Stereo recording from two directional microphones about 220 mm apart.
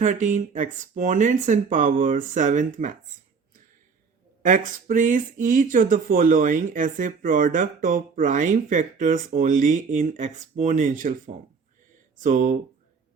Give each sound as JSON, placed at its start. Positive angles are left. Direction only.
{"t": 0.0, "sound": "speech", "side_deg": -35}
{"t": 4.4, "sound": "speech", "side_deg": -35}
{"t": 12.2, "sound": "speech", "side_deg": -35}